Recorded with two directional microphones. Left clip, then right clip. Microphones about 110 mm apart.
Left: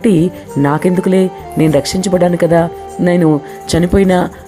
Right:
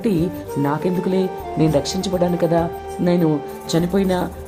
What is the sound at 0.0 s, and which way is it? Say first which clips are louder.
Speech: left 8 dB; 45° left (ahead or behind).